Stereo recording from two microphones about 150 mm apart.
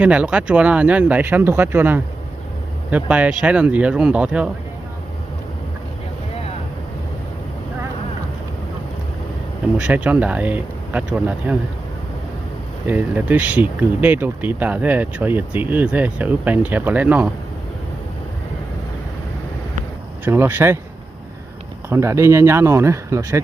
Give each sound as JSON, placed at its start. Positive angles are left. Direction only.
{"t": 0.0, "sound": "speech", "side_deg": -10}
{"t": 9.7, "sound": "speech", "side_deg": -10}
{"t": 12.9, "sound": "speech", "side_deg": -10}
{"t": 20.2, "sound": "speech", "side_deg": -15}
{"t": 21.8, "sound": "speech", "side_deg": -20}